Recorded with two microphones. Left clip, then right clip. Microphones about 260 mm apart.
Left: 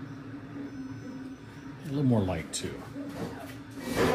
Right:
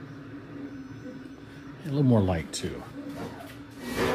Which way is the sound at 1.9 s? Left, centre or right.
Right.